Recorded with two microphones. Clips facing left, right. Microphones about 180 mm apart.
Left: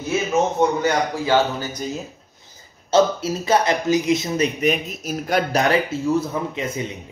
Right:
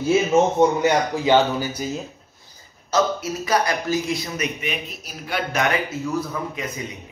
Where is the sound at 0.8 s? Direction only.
20° right (ahead or behind).